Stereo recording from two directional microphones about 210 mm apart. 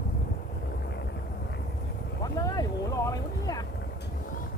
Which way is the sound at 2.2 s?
15° left (ahead or behind).